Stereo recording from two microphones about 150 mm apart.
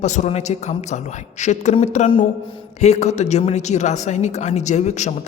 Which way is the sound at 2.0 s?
35° left (ahead or behind).